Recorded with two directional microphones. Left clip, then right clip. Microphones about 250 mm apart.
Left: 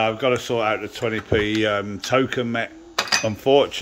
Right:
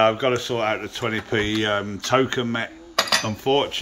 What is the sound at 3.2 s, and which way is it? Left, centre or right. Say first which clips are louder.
Cutlery: left 4 dB; centre.